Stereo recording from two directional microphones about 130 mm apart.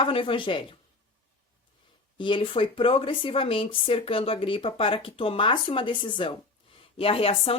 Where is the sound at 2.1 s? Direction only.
40° left (ahead or behind).